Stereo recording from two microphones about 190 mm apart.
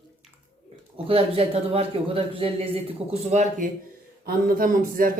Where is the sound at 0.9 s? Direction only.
30° right (ahead or behind).